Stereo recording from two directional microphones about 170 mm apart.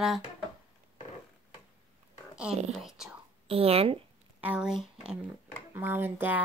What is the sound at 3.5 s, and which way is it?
Speech, 35° right (ahead or behind).